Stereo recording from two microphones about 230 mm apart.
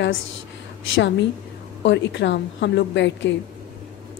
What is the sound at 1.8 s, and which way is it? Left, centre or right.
A woman's voice, left.